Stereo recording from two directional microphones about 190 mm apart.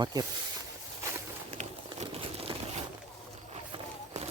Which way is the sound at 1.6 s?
40° right (ahead or behind).